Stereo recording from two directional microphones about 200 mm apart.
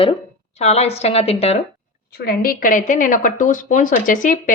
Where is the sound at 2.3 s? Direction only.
45° left (ahead or behind).